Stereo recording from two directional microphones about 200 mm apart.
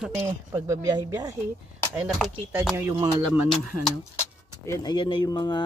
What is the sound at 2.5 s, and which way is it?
Speech, 10° right (ahead or behind).